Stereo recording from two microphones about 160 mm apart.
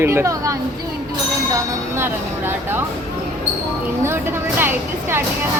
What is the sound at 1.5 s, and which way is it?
Train, 15° right (ahead or behind).